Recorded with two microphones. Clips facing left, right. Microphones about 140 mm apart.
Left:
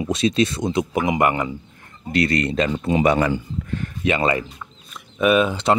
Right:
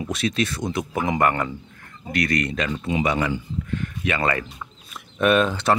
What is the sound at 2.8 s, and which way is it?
Speech, 45° left (ahead or behind).